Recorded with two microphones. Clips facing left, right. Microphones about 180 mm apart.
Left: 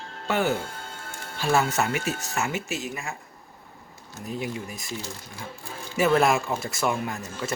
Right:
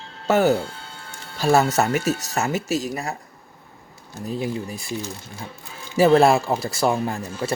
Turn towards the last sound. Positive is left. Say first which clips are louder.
# right 5 dB
turn(degrees=-35)  # may be behind; listen again after turning